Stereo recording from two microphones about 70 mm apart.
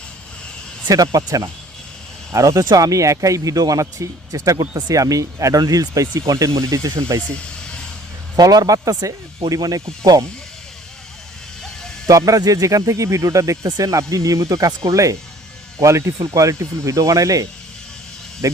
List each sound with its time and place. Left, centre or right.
0.9 s speech: right
7.2 s a sound: centre
8.4 s speech: right
12.0 s speech: right
13.7 s speech: right
14.7 s speech: right
15.8 s speech: right
16.1 s speech: right